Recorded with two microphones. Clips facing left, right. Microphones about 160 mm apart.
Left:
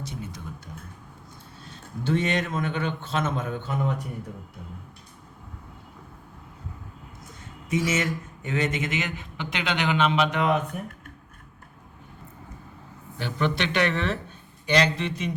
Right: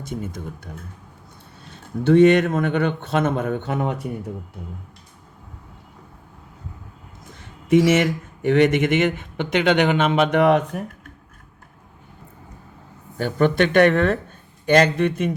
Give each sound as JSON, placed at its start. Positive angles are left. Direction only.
{"t": 0.0, "sound": "speech", "side_deg": -50}
{"t": 2.0, "sound": "speech", "side_deg": -65}
{"t": 7.8, "sound": "speech", "side_deg": -85}
{"t": 13.1, "sound": "speech", "side_deg": -45}